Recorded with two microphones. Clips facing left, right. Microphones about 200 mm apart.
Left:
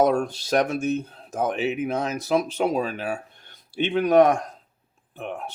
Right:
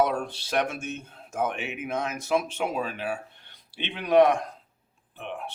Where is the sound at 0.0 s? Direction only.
45° left (ahead or behind).